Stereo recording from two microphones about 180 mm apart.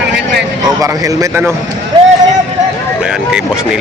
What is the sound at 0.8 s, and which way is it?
Speech, 15° right (ahead or behind).